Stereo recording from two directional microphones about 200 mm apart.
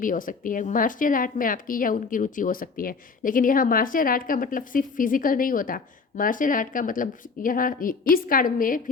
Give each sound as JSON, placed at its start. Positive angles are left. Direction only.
{"t": 0.0, "sound": "speech", "side_deg": 45}